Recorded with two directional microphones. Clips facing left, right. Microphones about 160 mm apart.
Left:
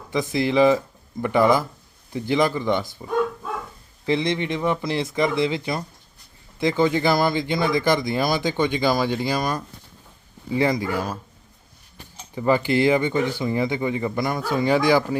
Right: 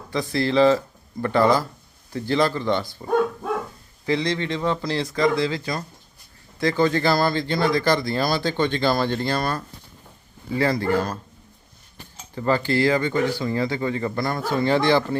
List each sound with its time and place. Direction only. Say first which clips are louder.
0.1 s speech: left 1 dB; 15° left (ahead or behind)
4.0 s speech: left 1 dB; 20° left (ahead or behind)
12.3 s speech: left 2 dB; 15° left (ahead or behind)